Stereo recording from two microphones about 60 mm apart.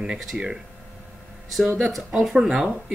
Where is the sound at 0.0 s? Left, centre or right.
Centre.